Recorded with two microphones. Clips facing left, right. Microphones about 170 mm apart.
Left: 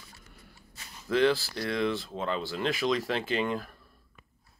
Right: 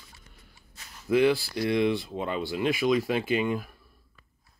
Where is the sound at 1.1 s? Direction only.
15° right (ahead or behind).